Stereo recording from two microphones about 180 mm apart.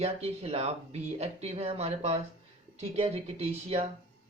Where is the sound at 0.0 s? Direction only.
35° right (ahead or behind).